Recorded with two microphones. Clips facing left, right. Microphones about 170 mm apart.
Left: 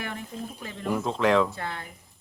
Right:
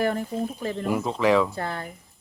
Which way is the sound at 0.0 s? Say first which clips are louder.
Right 10 dB; 40° right (ahead or behind).